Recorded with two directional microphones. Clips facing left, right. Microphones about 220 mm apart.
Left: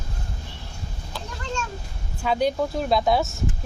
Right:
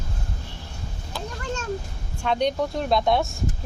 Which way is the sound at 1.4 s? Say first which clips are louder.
Left 1 dB; 55° right (ahead or behind).